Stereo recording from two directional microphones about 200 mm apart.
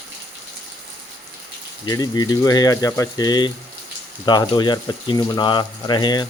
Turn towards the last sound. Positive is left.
turn(degrees=20)  # may be behind; listen again after turning